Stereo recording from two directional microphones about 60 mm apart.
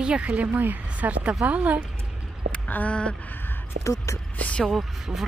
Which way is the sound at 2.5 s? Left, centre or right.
Left.